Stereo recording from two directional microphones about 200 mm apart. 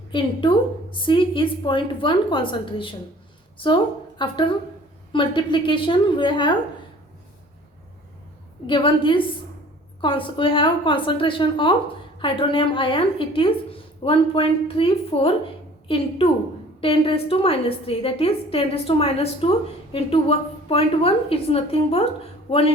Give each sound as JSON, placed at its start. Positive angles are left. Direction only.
{"t": 0.1, "sound": "a woman's voice", "side_deg": 25}
{"t": 4.2, "sound": "a woman's voice", "side_deg": 25}
{"t": 8.6, "sound": "a woman's voice", "side_deg": 25}